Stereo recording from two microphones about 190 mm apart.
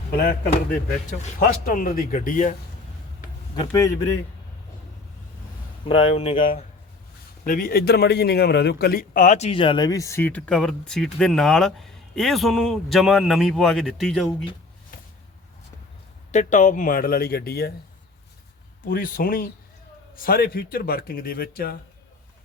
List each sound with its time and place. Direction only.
1.2 s a man's voice: 45° left (ahead or behind)
3.7 s a man's voice: 15° left (ahead or behind)
5.8 s speech: 30° left (ahead or behind)
7.4 s a man's voice: 50° left (ahead or behind); by 14.3 s centre (ahead or behind)
16.3 s a man's voice: 40° left (ahead or behind); by 17.7 s 55° left (ahead or behind)
18.9 s a man's voice: 50° left (ahead or behind)